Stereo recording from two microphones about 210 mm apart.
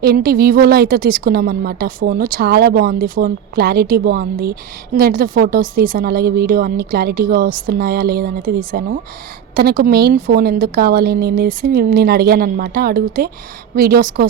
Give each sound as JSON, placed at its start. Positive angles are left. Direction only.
{"t": 0.0, "sound": "a woman's voice", "side_deg": -50}